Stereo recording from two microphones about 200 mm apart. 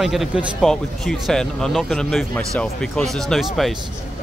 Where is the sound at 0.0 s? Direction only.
Centre (ahead or behind).